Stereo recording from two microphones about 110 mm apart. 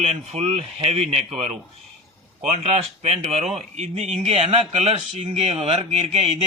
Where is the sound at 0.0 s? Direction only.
75° right (ahead or behind).